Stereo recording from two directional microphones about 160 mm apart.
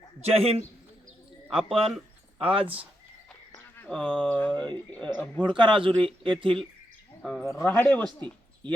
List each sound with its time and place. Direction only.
0.3 s a man's voice: 40° right (ahead or behind)
1.5 s speech: centre (ahead or behind)
2.4 s a man's voice: 35° right (ahead or behind)
3.5 s speech: 10° left (ahead or behind)
5.5 s a man's voice: 30° right (ahead or behind)
5.9 s speech: 5° left (ahead or behind)
6.4 s a man's voice: 35° right (ahead or behind)
7.2 s speech: 5° left (ahead or behind)
7.4 s speech: 15° left (ahead or behind)
8.6 s speech: 30° right (ahead or behind)